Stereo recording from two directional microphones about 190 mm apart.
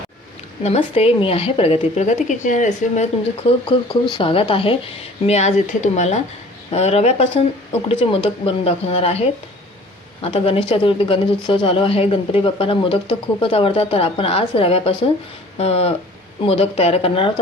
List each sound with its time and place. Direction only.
0.6 s speech: 30° left (ahead or behind)